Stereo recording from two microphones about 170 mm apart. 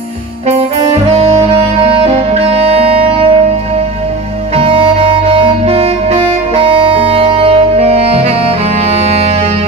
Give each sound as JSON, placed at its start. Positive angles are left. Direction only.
{"t": 2.3, "sound": "music", "side_deg": -35}
{"t": 4.6, "sound": "music", "side_deg": -30}